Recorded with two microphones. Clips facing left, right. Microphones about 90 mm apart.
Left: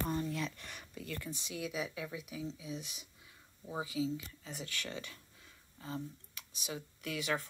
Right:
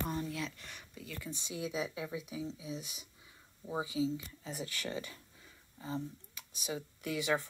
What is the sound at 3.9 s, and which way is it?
Speech, 30° right (ahead or behind).